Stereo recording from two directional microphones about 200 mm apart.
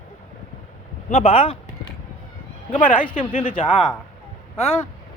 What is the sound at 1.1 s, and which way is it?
Speech, 30° left (ahead or behind).